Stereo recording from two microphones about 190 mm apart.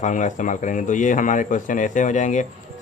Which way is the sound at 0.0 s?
40° left (ahead or behind).